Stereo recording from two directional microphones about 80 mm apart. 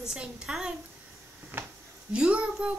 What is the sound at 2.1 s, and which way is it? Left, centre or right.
Speech, centre.